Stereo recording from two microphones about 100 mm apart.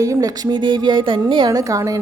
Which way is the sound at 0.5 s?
50° right (ahead or behind).